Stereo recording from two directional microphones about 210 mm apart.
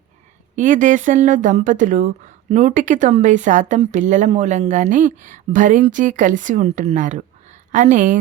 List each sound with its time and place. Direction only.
0.5 s speech: 35° right (ahead or behind)